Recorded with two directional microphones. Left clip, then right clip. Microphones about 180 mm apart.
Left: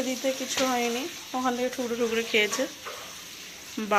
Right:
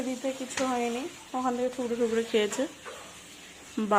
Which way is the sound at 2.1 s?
25° right (ahead or behind).